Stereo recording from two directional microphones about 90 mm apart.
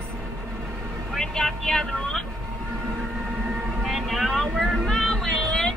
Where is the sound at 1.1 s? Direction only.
5° left (ahead or behind).